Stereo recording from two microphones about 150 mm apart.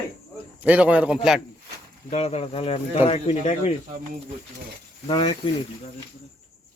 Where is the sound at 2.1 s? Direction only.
45° left (ahead or behind).